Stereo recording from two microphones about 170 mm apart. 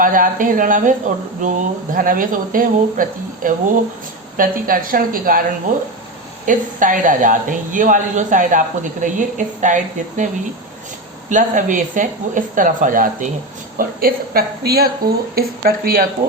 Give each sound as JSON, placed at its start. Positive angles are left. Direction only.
{"t": 0.0, "sound": "a woman's voice", "side_deg": -50}
{"t": 6.4, "sound": "a woman's voice", "side_deg": -50}
{"t": 11.3, "sound": "a woman's voice", "side_deg": -50}